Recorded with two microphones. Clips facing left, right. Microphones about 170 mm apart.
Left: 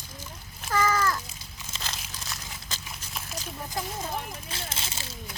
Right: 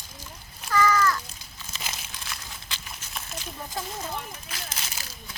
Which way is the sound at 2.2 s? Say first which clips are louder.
Left 1 dB; 40° left (ahead or behind).